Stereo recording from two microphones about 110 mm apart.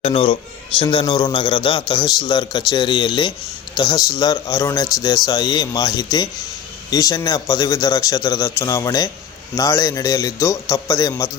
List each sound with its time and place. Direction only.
0.0 s a man's voice: 55° left (ahead or behind)
1.0 s a man's voice: 40° left (ahead or behind)